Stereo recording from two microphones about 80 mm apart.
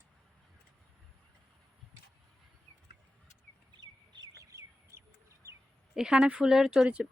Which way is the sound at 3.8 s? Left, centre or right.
Right.